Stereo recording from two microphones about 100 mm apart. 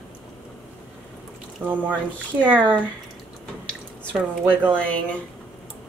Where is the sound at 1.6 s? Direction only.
15° right (ahead or behind).